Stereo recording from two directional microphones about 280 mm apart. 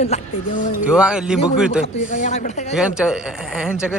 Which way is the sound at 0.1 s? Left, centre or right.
Left.